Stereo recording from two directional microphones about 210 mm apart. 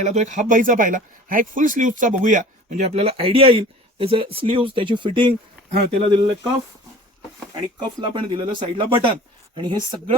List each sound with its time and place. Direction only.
0.0 s speech: 35° right (ahead or behind)
7.5 s speech: 25° right (ahead or behind)